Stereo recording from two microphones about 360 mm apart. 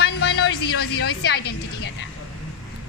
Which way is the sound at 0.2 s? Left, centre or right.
Left.